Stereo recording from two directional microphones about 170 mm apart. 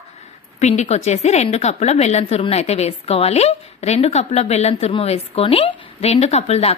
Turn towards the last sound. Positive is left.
turn(degrees=40)  # may be behind; listen again after turning